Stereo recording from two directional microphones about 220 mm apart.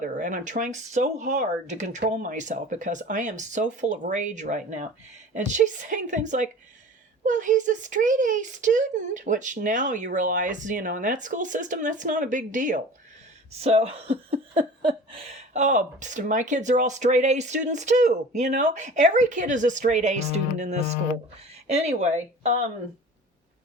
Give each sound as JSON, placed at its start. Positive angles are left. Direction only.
{"t": 0.0, "sound": "speech", "side_deg": -35}